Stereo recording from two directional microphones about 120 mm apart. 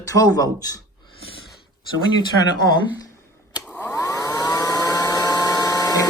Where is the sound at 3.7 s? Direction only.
15° left (ahead or behind).